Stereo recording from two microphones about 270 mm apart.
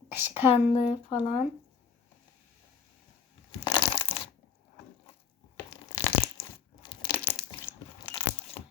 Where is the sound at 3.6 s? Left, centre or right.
Centre.